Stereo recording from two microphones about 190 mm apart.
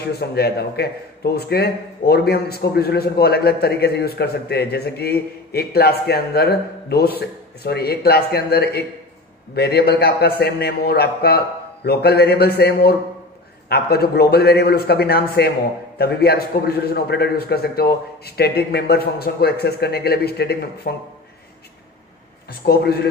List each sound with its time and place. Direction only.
0.0 s a man's voice: 55° left (ahead or behind)
22.5 s a man's voice: 55° left (ahead or behind)